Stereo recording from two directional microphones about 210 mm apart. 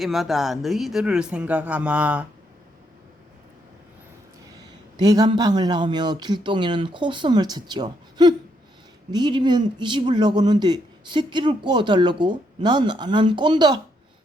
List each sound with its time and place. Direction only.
0.0 s speech: centre (ahead or behind)
4.9 s speech: 20° right (ahead or behind)